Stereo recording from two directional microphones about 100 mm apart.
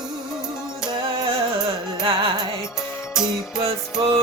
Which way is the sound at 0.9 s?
60° right (ahead or behind).